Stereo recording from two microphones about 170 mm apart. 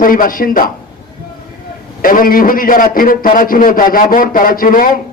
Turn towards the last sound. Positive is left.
turn(degrees=55)  # may be behind; listen again after turning